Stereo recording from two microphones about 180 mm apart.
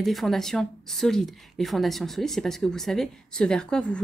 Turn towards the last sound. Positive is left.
turn(degrees=5)  # may be behind; listen again after turning